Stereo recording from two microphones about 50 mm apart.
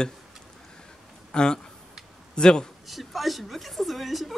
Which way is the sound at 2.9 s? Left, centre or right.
Centre.